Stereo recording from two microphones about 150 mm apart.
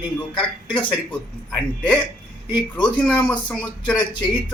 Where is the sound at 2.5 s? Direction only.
30° left (ahead or behind).